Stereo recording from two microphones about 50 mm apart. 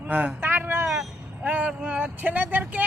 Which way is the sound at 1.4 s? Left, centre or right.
Right.